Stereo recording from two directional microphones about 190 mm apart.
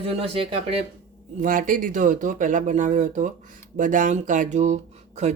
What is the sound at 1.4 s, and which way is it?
Speech, 45° right (ahead or behind).